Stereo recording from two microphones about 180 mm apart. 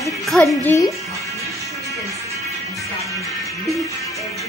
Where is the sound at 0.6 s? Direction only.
15° left (ahead or behind).